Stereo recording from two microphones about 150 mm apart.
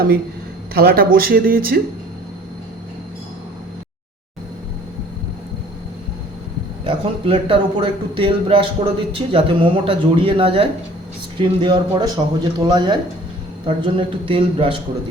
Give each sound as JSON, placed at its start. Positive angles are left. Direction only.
{"t": 0.7, "sound": "speech", "side_deg": -90}
{"t": 6.8, "sound": "a man's voice", "side_deg": -35}